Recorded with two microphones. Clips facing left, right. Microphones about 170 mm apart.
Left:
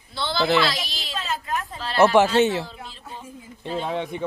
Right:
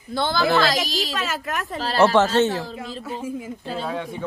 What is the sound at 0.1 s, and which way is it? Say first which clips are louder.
Speech: right 2 dB; 50° right (ahead or behind).